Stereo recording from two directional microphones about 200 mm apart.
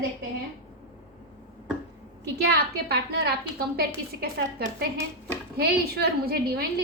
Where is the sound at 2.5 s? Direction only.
50° right (ahead or behind).